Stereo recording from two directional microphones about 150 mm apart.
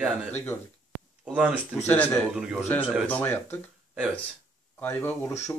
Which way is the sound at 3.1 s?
10° left (ahead or behind).